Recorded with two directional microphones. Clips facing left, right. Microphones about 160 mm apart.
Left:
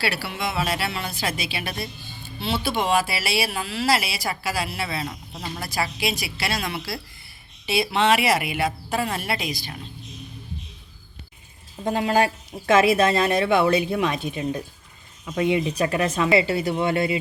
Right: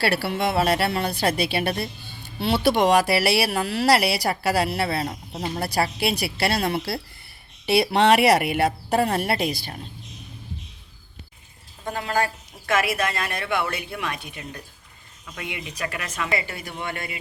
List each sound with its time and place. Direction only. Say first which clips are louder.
0.0 s speech: right 5 dB; 55° right (ahead or behind)
5.3 s speech: right 5 dB; 30° right (ahead or behind)
6.1 s speech: right 4 dB; 60° right (ahead or behind)
11.9 s speech: left 4 dB; 20° left (ahead or behind)